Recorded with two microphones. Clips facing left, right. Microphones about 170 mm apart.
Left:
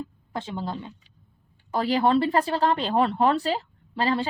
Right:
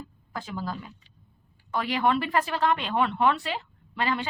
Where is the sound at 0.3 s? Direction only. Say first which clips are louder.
Left 3 dB; 25° left (ahead or behind).